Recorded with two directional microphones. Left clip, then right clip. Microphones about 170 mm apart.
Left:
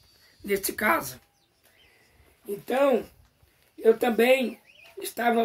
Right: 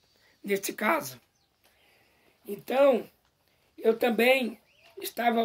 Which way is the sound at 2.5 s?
10° right (ahead or behind).